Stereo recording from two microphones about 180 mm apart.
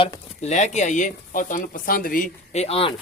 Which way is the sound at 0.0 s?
40° left (ahead or behind).